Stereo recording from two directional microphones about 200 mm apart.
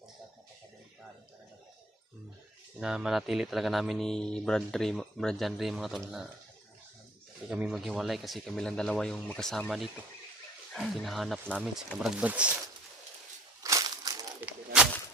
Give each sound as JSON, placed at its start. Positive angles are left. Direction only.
{"t": 2.8, "sound": "speech", "side_deg": 0}
{"t": 7.5, "sound": "speech", "side_deg": 0}
{"t": 13.6, "sound": "crushing", "side_deg": -15}